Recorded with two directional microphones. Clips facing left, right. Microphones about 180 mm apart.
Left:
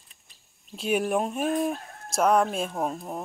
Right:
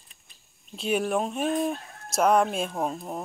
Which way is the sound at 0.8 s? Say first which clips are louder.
Left 1 dB; 10° left (ahead or behind).